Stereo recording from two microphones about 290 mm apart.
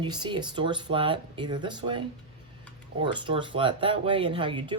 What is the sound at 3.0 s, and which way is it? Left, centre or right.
Speech, centre.